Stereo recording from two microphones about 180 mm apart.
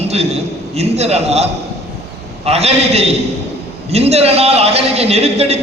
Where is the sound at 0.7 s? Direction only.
35° right (ahead or behind).